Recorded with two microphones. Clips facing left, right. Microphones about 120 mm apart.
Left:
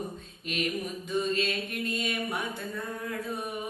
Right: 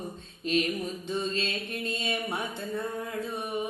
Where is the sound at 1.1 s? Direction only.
30° right (ahead or behind).